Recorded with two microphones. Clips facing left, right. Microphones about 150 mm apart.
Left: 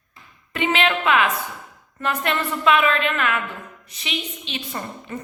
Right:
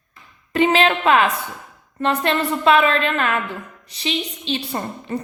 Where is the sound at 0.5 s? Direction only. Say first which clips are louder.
Right 5 dB; 35° right (ahead or behind).